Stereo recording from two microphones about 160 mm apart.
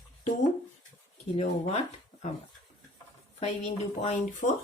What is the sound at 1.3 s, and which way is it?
Speech, 45° left (ahead or behind).